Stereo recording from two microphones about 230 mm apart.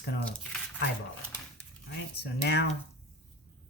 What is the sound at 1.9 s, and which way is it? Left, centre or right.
Speech, left.